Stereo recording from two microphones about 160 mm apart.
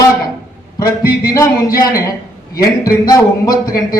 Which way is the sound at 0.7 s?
20° left (ahead or behind).